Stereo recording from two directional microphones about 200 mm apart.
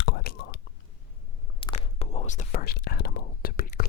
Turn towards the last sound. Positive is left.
turn(degrees=45)  # may be behind; listen again after turning